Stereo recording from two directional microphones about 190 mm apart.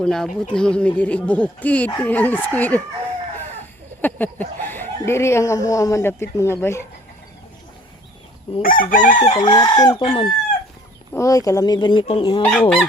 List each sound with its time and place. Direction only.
0.0 s speech: centre (ahead or behind)
4.0 s speech: 10° left (ahead or behind)
8.6 s chicken: 45° left (ahead or behind)
9.4 s speech: 20° left (ahead or behind)
11.1 s speech: 15° left (ahead or behind)
12.4 s speech: 5° left (ahead or behind)